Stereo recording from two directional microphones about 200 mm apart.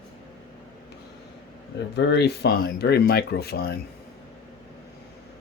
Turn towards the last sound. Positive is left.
turn(degrees=50)  # may be behind; listen again after turning